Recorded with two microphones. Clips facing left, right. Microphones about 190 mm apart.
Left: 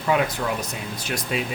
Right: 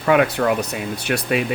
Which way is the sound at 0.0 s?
65° right (ahead or behind).